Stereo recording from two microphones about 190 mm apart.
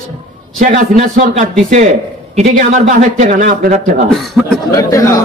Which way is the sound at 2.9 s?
40° right (ahead or behind).